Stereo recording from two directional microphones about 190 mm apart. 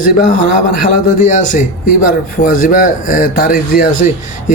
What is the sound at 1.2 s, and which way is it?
Speech, 40° left (ahead or behind).